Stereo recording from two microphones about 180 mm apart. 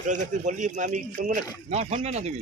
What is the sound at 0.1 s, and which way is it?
Speech, 45° right (ahead or behind).